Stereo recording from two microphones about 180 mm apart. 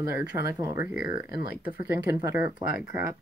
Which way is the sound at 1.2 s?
60° left (ahead or behind).